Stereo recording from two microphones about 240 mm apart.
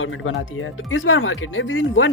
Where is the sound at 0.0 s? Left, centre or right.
Left.